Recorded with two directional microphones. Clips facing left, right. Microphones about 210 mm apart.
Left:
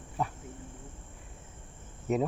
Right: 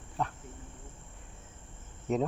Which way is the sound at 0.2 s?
5° left (ahead or behind).